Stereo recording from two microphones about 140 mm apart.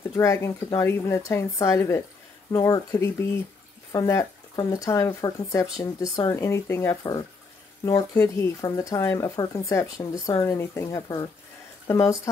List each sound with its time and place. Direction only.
0.1 s speech: 20° left (ahead or behind)